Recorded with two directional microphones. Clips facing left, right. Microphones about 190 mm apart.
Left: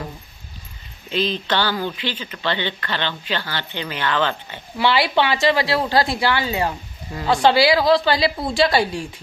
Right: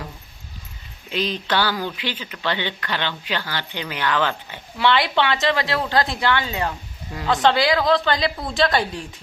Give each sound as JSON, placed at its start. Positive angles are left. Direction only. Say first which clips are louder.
{"t": 1.1, "sound": "speech", "louder": "left 1 dB", "side_deg": -10}
{"t": 4.8, "sound": "a woman's voice", "louder": "left 1 dB", "side_deg": 5}